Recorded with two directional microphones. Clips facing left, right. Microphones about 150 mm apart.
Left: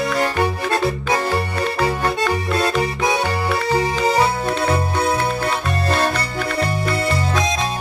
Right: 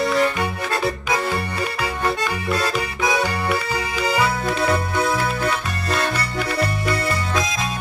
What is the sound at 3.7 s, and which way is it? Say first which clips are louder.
Music: left 5 dB; 30° left (ahead or behind).